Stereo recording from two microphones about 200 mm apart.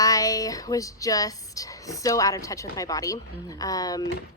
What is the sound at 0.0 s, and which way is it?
Music, 15° left (ahead or behind).